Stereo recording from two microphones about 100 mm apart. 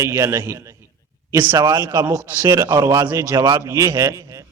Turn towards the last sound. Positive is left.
turn(degrees=-35)  # may be behind; listen again after turning